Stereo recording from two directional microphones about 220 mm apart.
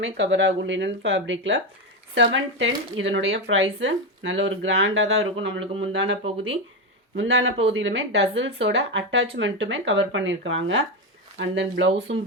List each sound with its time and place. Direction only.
0.0 s speech: 55° right (ahead or behind)
6.2 s speech: 25° right (ahead or behind)
7.2 s speech: 55° right (ahead or behind)